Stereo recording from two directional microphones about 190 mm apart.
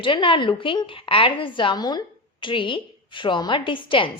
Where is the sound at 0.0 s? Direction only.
25° left (ahead or behind).